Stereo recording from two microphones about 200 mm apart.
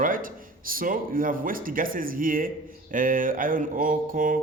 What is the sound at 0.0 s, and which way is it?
Speech, 45° right (ahead or behind).